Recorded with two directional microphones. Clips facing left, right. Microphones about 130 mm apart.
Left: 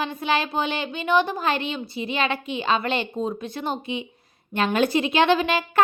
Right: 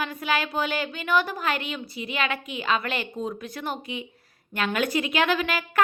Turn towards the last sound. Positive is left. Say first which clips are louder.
# left 4 dB
turn(degrees=25)  # may be behind; listen again after turning